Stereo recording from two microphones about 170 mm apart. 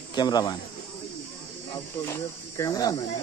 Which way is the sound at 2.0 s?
20° left (ahead or behind).